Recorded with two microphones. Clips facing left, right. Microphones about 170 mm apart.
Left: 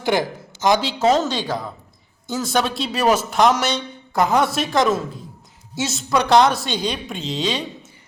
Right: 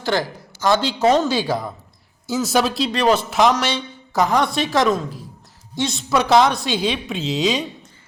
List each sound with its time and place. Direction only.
0.0 s a man's voice: 15° left (ahead or behind)
0.8 s a woman's voice: centre (ahead or behind)